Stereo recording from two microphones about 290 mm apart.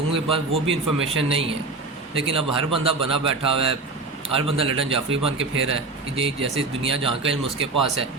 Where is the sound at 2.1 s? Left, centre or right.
Centre.